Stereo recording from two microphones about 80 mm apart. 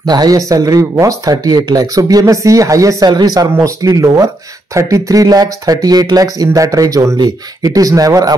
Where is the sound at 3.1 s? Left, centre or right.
Right.